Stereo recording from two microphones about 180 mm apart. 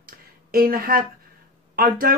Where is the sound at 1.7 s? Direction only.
55° right (ahead or behind).